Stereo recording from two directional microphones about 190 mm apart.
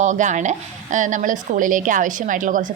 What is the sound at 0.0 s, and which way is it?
Speech, 40° right (ahead or behind).